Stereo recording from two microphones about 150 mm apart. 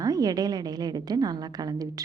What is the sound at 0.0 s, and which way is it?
A woman's voice, 25° right (ahead or behind).